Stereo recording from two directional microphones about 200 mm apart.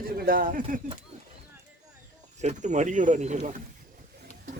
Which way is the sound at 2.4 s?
35° right (ahead or behind).